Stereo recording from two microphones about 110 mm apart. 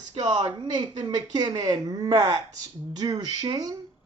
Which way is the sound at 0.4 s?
40° right (ahead or behind).